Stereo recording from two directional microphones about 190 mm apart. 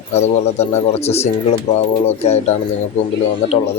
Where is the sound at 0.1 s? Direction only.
35° left (ahead or behind).